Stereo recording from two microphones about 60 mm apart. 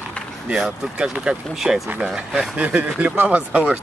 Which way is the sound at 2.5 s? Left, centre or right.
Right.